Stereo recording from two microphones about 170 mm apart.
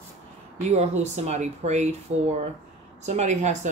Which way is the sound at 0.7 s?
40° right (ahead or behind).